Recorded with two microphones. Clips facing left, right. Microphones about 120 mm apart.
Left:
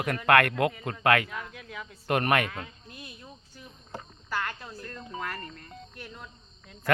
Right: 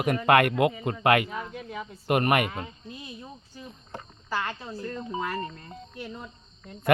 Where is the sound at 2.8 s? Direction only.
65° left (ahead or behind).